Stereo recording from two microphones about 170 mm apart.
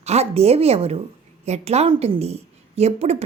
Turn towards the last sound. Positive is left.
turn(degrees=-40)  # may be behind; listen again after turning